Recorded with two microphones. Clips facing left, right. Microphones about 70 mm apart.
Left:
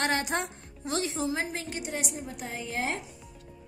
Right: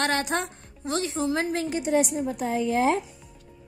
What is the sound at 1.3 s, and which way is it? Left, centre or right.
Speech, right.